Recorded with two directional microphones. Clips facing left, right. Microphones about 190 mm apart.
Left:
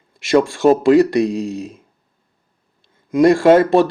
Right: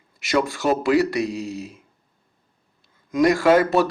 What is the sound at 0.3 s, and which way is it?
Speech, 30° left (ahead or behind).